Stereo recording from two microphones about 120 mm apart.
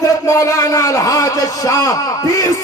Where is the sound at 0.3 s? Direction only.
25° left (ahead or behind).